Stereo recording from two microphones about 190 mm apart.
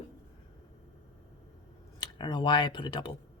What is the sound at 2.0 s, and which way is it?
Speech, 25° left (ahead or behind).